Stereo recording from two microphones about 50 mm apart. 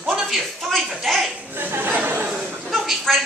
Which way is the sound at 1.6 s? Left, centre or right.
Right.